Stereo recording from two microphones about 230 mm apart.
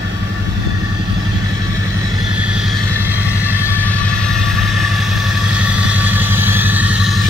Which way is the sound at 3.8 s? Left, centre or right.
Centre.